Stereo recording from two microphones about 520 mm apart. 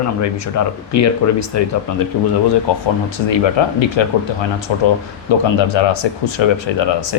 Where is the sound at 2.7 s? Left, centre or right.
Left.